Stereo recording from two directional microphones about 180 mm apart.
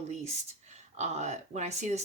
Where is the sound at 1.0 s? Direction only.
40° right (ahead or behind).